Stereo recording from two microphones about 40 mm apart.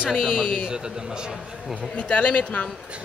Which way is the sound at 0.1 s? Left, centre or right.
Centre.